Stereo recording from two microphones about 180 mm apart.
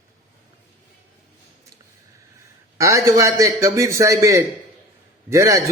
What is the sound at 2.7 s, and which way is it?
A man's voice, 15° right (ahead or behind).